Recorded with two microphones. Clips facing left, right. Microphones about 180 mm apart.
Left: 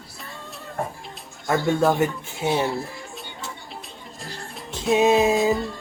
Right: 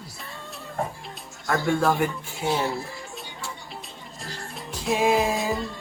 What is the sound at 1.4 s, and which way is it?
Speech, 20° left (ahead or behind).